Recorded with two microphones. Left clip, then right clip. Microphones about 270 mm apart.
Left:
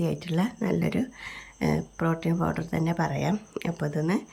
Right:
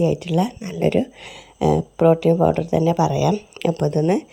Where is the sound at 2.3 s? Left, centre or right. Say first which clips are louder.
Right 14 dB; right.